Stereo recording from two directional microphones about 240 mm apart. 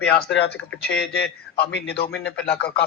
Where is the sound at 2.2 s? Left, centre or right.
Centre.